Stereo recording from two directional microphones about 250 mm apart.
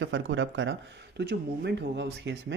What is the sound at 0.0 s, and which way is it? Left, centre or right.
Speech, right.